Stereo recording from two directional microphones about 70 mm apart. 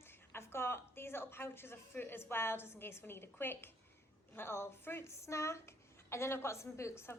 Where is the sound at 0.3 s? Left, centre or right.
Left.